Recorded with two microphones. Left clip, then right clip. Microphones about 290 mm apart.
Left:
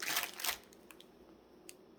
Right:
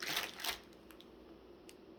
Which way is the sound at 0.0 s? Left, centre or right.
Centre.